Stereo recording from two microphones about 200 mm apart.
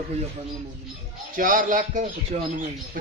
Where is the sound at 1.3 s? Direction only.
45° right (ahead or behind).